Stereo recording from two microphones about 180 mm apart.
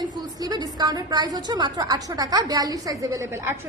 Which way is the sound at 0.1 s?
20° right (ahead or behind).